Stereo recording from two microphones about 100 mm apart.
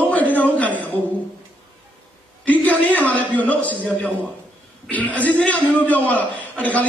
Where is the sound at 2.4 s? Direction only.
15° left (ahead or behind).